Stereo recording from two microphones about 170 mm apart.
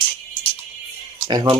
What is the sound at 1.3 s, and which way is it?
Speech, 25° right (ahead or behind).